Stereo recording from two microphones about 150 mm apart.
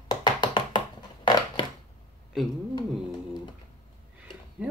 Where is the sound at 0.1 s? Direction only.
30° left (ahead or behind).